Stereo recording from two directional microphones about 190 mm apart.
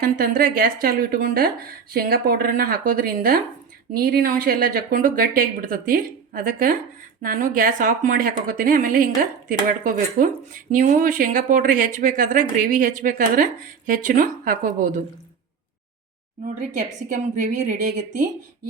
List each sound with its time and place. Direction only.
0.2 s speech: 50° right (ahead or behind)
16.6 s a woman's voice: 40° right (ahead or behind)